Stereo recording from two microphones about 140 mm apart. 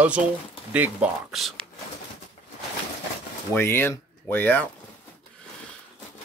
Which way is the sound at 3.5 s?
15° left (ahead or behind).